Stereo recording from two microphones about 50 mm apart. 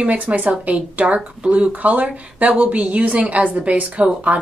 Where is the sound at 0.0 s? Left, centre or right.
Right.